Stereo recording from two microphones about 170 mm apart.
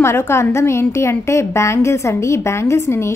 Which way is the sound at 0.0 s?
15° left (ahead or behind).